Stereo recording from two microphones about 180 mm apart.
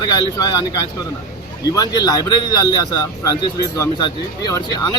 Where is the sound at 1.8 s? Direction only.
20° left (ahead or behind).